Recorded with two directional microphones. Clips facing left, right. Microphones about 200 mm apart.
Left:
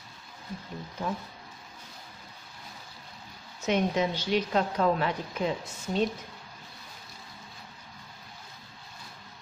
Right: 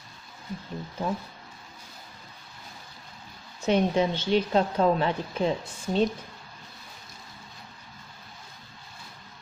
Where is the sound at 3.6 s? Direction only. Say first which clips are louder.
Right 3 dB; 30° right (ahead or behind).